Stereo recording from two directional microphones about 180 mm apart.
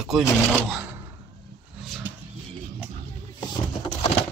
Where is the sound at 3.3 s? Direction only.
25° left (ahead or behind).